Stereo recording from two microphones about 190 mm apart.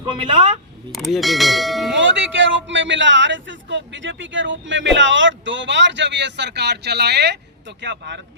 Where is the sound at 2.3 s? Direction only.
75° right (ahead or behind).